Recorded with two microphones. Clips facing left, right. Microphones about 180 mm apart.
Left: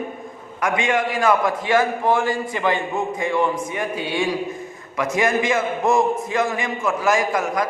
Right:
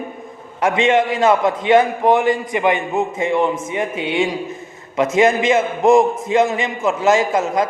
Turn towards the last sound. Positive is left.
turn(degrees=-25)  # may be behind; listen again after turning